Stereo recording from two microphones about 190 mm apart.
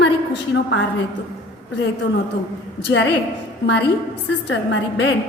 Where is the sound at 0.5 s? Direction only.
70° left (ahead or behind).